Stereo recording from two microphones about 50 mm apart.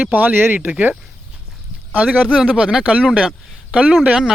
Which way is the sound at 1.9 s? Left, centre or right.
Right.